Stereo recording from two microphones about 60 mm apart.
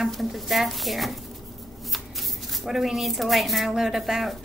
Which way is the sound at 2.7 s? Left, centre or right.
Centre.